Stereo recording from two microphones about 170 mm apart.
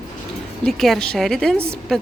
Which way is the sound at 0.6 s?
Centre (ahead or behind).